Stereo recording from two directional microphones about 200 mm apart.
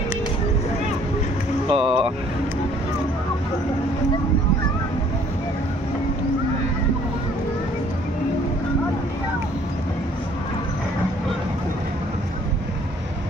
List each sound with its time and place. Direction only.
1.7 s vehicle: 25° right (ahead or behind)